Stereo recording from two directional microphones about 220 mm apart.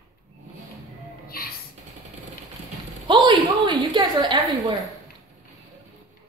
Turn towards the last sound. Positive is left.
turn(degrees=-20)  # may be behind; listen again after turning